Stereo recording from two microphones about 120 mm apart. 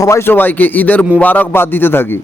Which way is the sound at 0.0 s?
25° left (ahead or behind).